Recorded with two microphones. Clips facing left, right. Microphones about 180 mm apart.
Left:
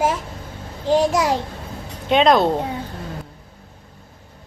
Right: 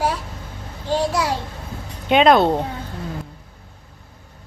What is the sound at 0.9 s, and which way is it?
Speech, 15° left (ahead or behind).